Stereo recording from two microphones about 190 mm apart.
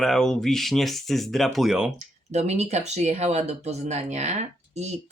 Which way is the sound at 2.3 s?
35° right (ahead or behind).